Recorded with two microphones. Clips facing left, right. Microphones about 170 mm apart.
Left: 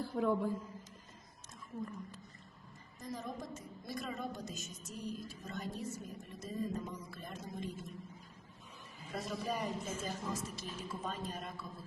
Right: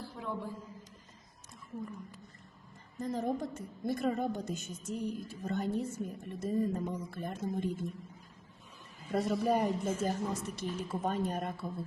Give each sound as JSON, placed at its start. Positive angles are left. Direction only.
{"t": 0.0, "sound": "a woman's voice", "side_deg": 50}
{"t": 3.0, "sound": "a woman's voice", "side_deg": -60}
{"t": 9.1, "sound": "a woman's voice", "side_deg": -60}